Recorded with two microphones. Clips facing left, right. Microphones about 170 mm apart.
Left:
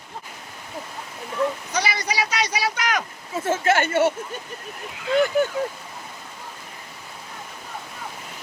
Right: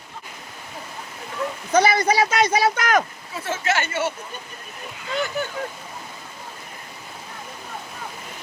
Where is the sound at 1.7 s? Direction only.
50° right (ahead or behind).